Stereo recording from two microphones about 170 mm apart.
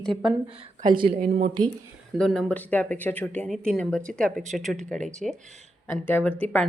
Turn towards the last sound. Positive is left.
turn(degrees=10)  # may be behind; listen again after turning